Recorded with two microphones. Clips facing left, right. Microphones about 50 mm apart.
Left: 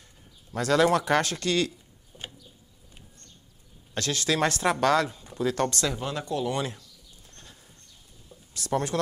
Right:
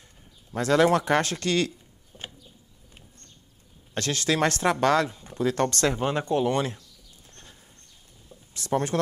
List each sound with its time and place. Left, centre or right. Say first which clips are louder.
0.5 s speech: right 1 dB; right
2.1 s bird: right 1 dB; centre
3.9 s speech: right 1 dB; right
7.2 s a sound: right 1 dB; right
8.5 s speech: right 2 dB; right